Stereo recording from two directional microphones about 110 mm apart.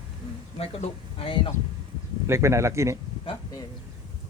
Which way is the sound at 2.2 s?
25° right (ahead or behind).